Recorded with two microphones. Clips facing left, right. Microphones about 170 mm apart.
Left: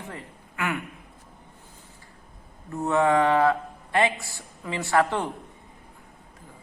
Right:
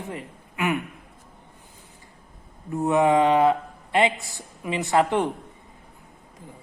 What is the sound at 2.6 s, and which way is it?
Speech, 15° right (ahead or behind).